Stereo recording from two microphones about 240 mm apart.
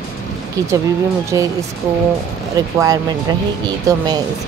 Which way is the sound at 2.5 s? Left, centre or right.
Centre.